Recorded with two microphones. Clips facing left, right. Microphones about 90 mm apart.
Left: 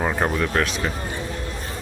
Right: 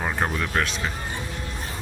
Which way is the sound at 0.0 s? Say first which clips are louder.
Left 4 dB; 5° left (ahead or behind).